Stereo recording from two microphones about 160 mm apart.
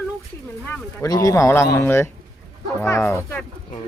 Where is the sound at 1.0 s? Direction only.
20° left (ahead or behind).